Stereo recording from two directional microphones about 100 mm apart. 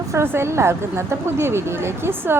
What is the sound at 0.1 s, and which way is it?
A woman's voice, 25° right (ahead or behind).